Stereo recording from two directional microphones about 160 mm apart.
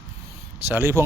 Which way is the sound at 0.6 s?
15° right (ahead or behind).